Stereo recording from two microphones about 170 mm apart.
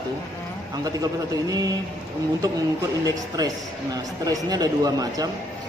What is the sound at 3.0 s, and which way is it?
Speech, 25° right (ahead or behind).